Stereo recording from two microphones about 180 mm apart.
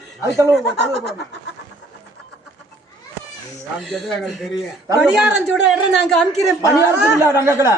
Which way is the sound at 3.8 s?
Centre (ahead or behind).